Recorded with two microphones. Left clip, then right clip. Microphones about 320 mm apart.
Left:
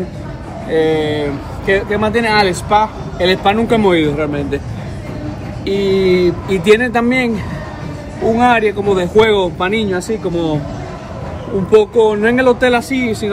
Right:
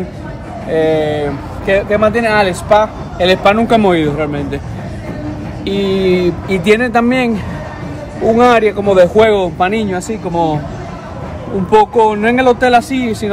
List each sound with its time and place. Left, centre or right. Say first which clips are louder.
0.7 s speech: right 1 dB; centre
5.7 s speech: left 1 dB; centre
8.4 s speech: right 3 dB; centre
11.8 s speech: right 2 dB; right
12.2 s speech: right 1 dB; centre